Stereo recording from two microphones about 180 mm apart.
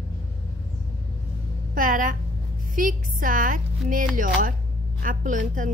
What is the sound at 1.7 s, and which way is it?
A woman's voice, 50° right (ahead or behind).